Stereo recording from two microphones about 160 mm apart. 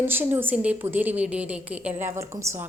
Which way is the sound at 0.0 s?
15° right (ahead or behind).